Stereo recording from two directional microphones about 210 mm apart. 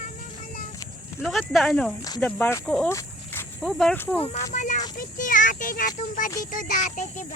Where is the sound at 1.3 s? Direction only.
Centre (ahead or behind).